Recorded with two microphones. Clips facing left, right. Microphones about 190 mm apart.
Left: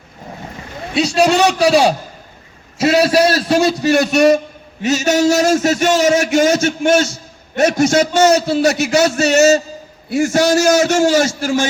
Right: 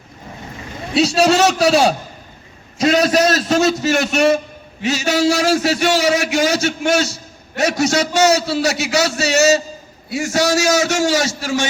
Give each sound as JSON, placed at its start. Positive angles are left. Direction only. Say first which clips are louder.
{"t": 0.9, "sound": "a man's voice", "louder": "even", "side_deg": -5}
{"t": 3.9, "sound": "a man's voice", "louder": "left 7 dB", "side_deg": 35}